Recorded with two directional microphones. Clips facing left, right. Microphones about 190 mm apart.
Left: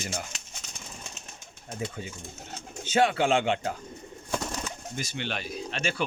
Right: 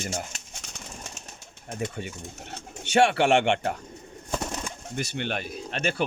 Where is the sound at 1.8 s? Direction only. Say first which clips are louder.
Right 3 dB; 65° right (ahead or behind).